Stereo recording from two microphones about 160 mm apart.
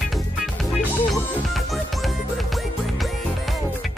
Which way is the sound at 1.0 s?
10° left (ahead or behind).